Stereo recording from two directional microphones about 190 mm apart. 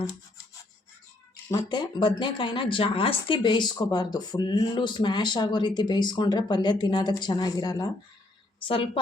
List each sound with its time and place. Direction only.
1.5 s speech: 20° left (ahead or behind)